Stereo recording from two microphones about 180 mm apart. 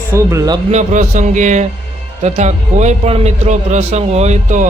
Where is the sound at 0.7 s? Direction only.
45° right (ahead or behind).